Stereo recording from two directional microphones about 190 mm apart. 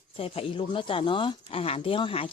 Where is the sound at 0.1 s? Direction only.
30° left (ahead or behind).